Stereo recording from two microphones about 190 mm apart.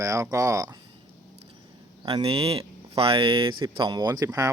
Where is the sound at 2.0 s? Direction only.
30° right (ahead or behind).